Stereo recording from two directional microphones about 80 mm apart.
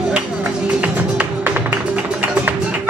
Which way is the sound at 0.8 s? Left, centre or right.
Right.